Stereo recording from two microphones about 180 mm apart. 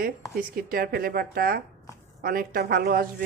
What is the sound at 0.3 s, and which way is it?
A woman's voice, 55° right (ahead or behind).